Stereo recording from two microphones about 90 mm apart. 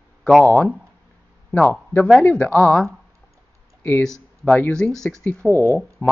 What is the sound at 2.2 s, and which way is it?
Speech, 20° left (ahead or behind).